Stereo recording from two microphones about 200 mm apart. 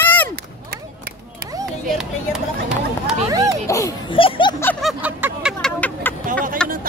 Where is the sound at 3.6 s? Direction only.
15° left (ahead or behind).